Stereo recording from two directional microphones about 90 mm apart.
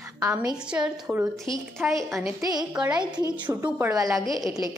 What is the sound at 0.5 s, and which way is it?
A woman's voice, 10° right (ahead or behind).